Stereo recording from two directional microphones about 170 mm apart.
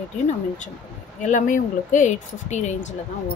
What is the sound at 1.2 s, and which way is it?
Speech, 45° left (ahead or behind).